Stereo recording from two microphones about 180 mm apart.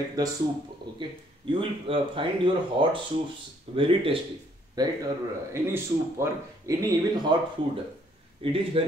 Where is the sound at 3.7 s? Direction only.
30° right (ahead or behind).